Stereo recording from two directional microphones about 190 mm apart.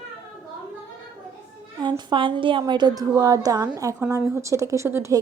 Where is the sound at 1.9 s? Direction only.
25° right (ahead or behind).